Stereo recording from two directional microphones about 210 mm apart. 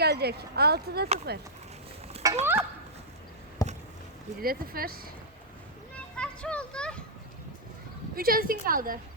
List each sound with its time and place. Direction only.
0.0 s speech: 50° right (ahead or behind)
2.4 s fowl: 10° right (ahead or behind)
3.6 s a sound: 15° left (ahead or behind)
4.4 s speech: 45° right (ahead or behind)
6.1 s a child's voice: 5° left (ahead or behind)
8.1 s speech: 45° right (ahead or behind)